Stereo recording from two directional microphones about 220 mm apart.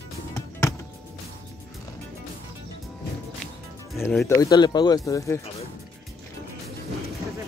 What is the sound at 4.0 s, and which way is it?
Speech, 10° left (ahead or behind).